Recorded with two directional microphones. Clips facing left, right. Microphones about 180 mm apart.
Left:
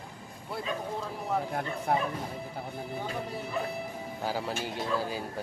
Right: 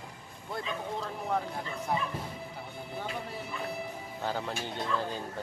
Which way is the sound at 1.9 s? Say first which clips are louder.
Left 4 dB; 60° left (ahead or behind).